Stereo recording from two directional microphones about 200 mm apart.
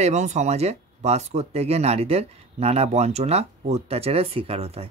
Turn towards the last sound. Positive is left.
turn(degrees=-30)  # may be behind; listen again after turning